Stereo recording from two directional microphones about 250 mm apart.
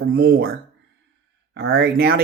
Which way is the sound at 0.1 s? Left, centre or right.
Right.